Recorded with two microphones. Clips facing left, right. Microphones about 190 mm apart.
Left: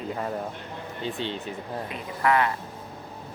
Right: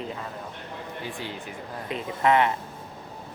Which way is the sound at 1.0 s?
25° left (ahead or behind).